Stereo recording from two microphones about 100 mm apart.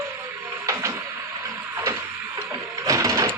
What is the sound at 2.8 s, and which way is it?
Printer, 30° right (ahead or behind).